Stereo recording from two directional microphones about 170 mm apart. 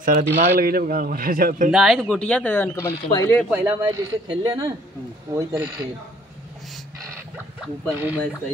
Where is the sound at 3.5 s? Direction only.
15° right (ahead or behind).